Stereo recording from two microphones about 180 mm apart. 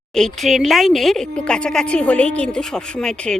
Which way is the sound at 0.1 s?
5° left (ahead or behind).